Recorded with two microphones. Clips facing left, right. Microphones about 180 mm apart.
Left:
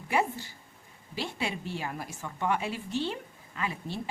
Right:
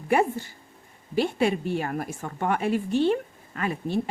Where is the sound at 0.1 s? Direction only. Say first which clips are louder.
Right 6 dB; 55° right (ahead or behind).